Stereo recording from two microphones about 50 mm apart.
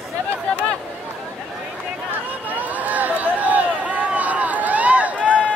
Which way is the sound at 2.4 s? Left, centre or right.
Right.